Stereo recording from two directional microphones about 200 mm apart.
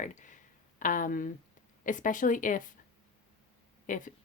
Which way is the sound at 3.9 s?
40° left (ahead or behind).